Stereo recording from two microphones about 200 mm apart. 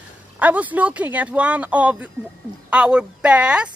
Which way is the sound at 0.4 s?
10° right (ahead or behind).